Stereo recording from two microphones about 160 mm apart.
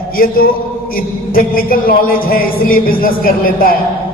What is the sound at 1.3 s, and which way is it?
Music, 65° left (ahead or behind).